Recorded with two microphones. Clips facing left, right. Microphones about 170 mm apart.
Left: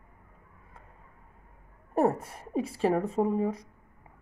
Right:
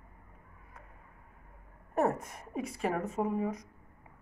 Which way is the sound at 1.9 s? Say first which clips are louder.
Left 4 dB; 30° left (ahead or behind).